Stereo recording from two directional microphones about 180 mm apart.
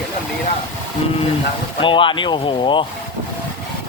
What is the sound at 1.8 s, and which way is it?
Speech, 30° left (ahead or behind).